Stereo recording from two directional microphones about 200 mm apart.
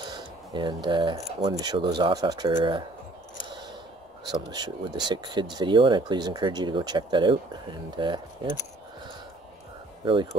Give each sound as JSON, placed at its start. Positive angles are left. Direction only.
{"t": 0.0, "sound": "speech", "side_deg": -25}
{"t": 4.5, "sound": "speech", "side_deg": -20}